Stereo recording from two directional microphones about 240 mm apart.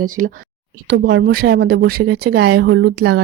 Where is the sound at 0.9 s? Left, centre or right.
Right.